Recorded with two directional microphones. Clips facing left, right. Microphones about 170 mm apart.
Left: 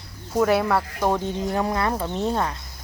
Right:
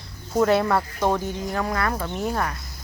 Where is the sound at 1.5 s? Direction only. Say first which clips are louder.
Left 1 dB; 25° left (ahead or behind).